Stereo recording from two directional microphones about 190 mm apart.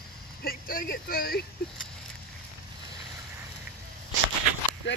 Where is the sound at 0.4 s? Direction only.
50° left (ahead or behind).